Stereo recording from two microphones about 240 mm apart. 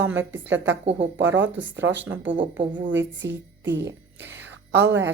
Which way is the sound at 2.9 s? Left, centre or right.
Right.